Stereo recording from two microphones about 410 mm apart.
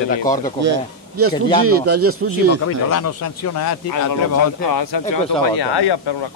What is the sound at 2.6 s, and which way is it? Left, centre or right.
Speech, left.